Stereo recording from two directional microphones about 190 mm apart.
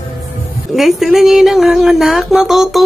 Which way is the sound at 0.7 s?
Centre (ahead or behind).